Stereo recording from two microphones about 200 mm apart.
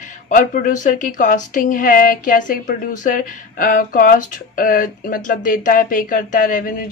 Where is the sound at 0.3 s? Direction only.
40° left (ahead or behind).